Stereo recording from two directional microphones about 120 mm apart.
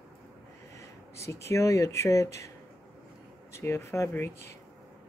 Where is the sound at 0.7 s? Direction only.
25° left (ahead or behind).